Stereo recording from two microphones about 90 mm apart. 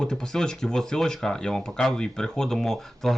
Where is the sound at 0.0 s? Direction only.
10° left (ahead or behind).